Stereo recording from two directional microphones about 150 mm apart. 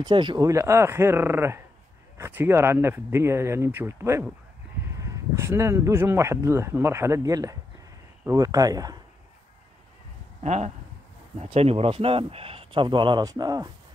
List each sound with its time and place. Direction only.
0.0 s speech: 30° right (ahead or behind)
0.5 s speech: 20° right (ahead or behind)
10.4 s speech: 50° right (ahead or behind); by 13.7 s 25° right (ahead or behind)